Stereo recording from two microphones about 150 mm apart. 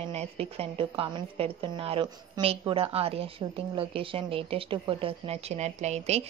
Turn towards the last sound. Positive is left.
turn(degrees=-45)  # may be behind; listen again after turning